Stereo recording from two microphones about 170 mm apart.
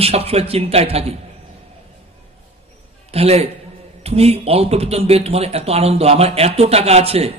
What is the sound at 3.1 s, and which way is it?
Speech, 35° right (ahead or behind).